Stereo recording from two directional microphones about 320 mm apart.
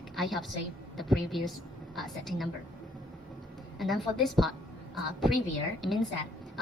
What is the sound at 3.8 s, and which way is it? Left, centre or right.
Speech, centre.